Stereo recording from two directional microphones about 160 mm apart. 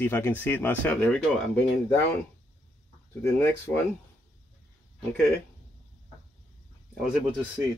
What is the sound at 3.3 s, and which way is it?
Speech, 15° left (ahead or behind).